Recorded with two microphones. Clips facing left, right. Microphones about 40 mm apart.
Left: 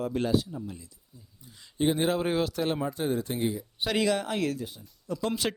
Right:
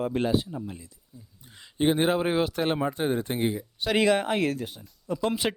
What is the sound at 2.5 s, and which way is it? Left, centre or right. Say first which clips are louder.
Speech: right 3 dB; right.